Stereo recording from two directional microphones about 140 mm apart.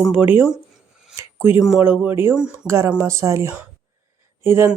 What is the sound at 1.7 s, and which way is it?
Speech, 10° right (ahead or behind).